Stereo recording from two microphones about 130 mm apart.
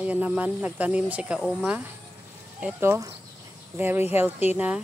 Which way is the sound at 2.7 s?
20° right (ahead or behind).